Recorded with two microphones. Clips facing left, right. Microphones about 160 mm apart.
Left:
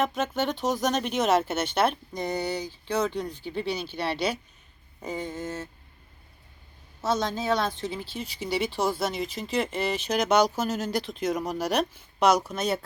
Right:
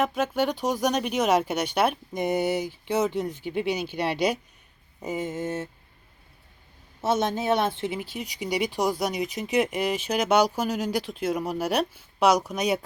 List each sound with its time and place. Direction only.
0.0 s a woman's voice: 10° right (ahead or behind); by 5.6 s 25° right (ahead or behind)
7.0 s a woman's voice: 25° right (ahead or behind)